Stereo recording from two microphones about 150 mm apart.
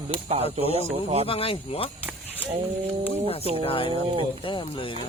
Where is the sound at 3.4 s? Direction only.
40° right (ahead or behind).